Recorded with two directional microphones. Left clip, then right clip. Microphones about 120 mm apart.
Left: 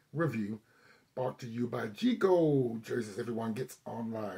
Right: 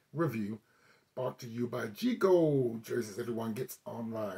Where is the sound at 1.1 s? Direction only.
25° right (ahead or behind).